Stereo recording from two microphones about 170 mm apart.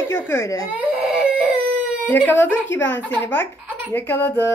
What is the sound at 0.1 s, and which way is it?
Speech, 15° left (ahead or behind).